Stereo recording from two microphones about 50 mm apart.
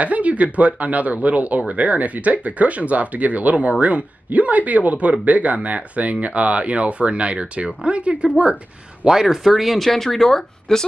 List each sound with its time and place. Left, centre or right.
0.0 s speech: right
9.0 s speech: centre